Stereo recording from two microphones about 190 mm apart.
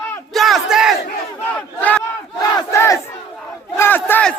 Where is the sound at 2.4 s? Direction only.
20° left (ahead or behind).